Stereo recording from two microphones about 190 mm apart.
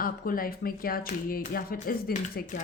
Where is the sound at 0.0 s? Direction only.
50° left (ahead or behind).